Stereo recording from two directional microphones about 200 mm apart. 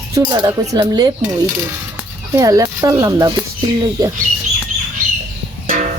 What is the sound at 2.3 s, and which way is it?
Speech, 15° right (ahead or behind).